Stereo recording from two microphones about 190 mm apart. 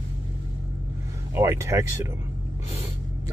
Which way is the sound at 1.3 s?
15° right (ahead or behind).